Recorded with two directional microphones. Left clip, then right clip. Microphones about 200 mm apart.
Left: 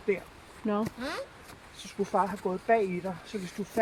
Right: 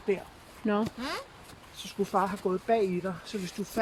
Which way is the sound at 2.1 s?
50° right (ahead or behind).